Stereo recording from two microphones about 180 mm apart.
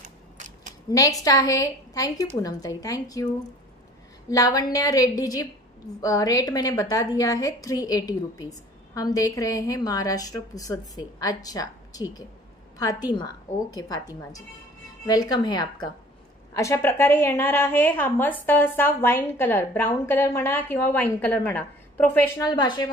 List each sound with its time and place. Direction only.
0.9 s a woman's voice: 20° left (ahead or behind)
4.3 s a woman's voice: 20° left (ahead or behind)
22.6 s a woman's voice: 25° left (ahead or behind)